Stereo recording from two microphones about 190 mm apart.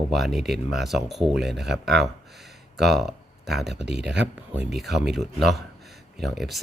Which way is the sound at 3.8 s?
60° right (ahead or behind).